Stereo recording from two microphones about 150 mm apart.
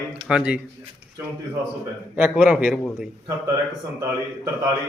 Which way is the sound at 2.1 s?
5° right (ahead or behind).